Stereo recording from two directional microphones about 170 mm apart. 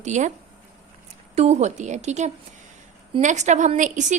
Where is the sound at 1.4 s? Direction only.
40° right (ahead or behind).